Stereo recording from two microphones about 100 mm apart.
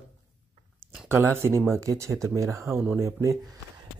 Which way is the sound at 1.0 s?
25° right (ahead or behind).